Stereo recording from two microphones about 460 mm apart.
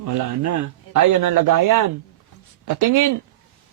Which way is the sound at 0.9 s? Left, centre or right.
Right.